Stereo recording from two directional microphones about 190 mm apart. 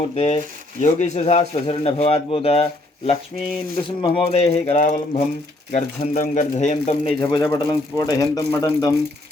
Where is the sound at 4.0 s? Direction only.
30° left (ahead or behind).